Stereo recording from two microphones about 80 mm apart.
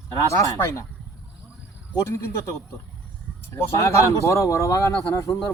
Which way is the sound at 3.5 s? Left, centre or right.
Left.